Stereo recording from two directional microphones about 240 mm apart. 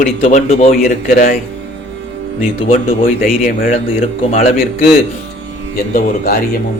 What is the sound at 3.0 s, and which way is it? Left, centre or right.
Speech, left.